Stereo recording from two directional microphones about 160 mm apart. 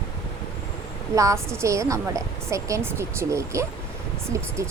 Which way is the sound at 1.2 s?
20° right (ahead or behind).